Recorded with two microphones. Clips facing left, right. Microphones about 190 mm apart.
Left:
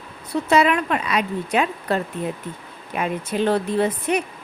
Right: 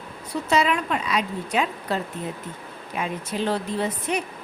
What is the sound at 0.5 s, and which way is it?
A woman's voice, 60° left (ahead or behind).